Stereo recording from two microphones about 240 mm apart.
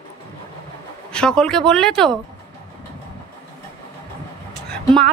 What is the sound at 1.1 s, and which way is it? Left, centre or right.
Speech, centre.